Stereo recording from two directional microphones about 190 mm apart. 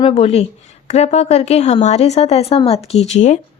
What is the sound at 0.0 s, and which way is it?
A woman's voice, 30° left (ahead or behind).